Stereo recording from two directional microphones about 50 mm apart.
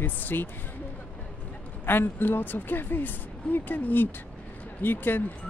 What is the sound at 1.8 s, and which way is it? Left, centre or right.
Speech, left.